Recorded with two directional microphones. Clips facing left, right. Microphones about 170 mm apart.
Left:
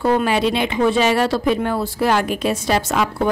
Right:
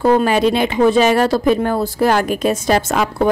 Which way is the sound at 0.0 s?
40° right (ahead or behind).